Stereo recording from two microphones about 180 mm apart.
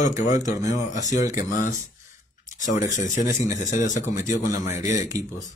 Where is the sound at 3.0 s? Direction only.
45° left (ahead or behind).